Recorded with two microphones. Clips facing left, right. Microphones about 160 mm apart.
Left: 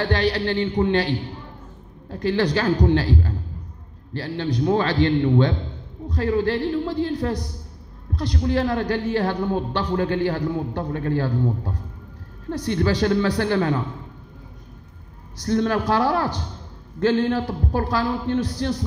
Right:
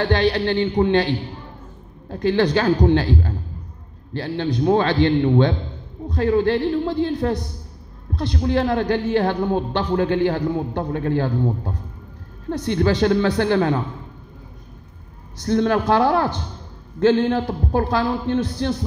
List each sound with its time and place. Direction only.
0.0 s a man's voice: 25° right (ahead or behind)
15.3 s a man's voice: 25° right (ahead or behind)